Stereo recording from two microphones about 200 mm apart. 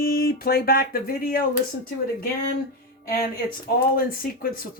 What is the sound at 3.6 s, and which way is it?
Speech, 45° left (ahead or behind).